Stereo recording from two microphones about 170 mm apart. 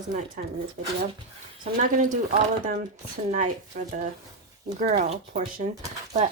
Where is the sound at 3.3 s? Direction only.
45° right (ahead or behind).